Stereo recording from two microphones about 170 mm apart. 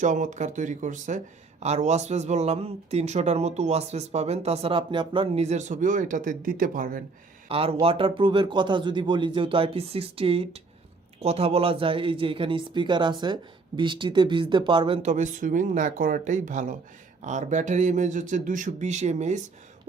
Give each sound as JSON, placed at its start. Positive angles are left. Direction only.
{"t": 0.0, "sound": "speech", "side_deg": -45}
{"t": 7.4, "sound": "speech", "side_deg": -35}